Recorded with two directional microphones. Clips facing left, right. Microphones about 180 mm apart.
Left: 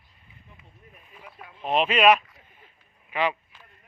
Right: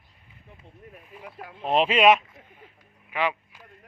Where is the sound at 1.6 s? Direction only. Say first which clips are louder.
Right 1 dB; 30° right (ahead or behind).